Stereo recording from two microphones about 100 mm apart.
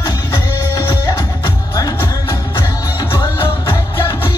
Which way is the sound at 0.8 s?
40° left (ahead or behind).